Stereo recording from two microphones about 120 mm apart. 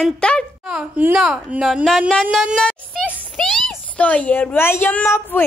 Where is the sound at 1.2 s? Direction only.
5° right (ahead or behind); by 5.4 s 15° left (ahead or behind).